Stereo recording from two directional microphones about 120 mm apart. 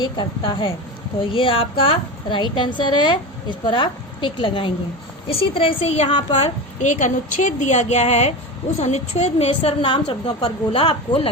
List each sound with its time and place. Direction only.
0.0 s a woman's voice: 40° left (ahead or behind); by 6.1 s 60° left (ahead or behind)
6.3 s a woman's voice: 80° left
9.5 s a woman's voice: 45° left (ahead or behind)